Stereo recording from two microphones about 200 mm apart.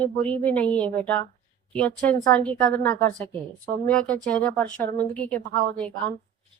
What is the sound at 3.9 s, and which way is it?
A woman's voice, 5° left (ahead or behind).